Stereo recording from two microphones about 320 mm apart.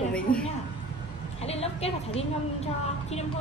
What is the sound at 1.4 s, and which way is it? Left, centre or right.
A woman's voice, centre.